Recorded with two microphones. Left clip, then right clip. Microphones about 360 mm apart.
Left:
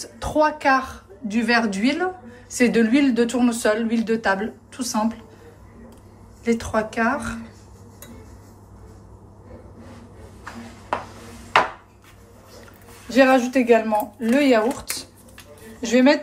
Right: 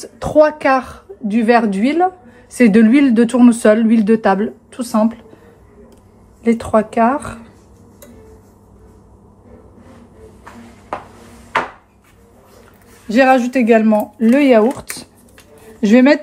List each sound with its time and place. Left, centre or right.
0.0 s a woman's voice: centre
6.4 s a woman's voice: centre
13.1 s speech: right